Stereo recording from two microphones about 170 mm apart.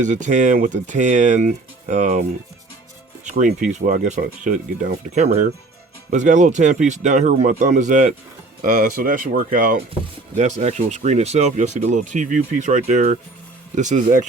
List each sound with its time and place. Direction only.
0.0 s speech: 45° right (ahead or behind)
3.2 s speech: 45° right (ahead or behind)
8.6 s speech: 55° right (ahead or behind)